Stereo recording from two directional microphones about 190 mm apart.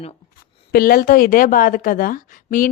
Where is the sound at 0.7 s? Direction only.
50° left (ahead or behind).